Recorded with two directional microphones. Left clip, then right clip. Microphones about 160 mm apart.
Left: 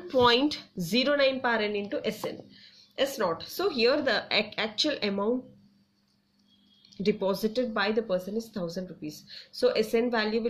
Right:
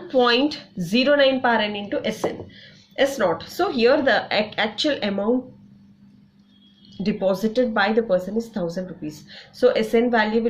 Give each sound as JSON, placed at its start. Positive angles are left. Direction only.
{"t": 0.1, "sound": "a woman's voice", "side_deg": 45}
{"t": 7.2, "sound": "a woman's voice", "side_deg": 25}